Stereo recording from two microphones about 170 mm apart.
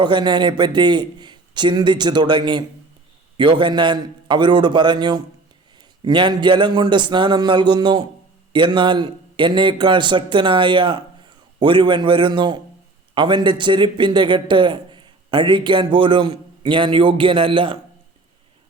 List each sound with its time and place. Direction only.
0.0 s a man's voice: 25° right (ahead or behind)